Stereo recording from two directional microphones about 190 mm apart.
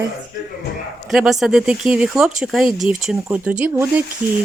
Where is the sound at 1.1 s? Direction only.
Centre (ahead or behind).